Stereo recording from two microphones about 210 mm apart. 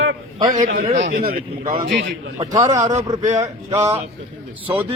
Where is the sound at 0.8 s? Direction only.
35° right (ahead or behind).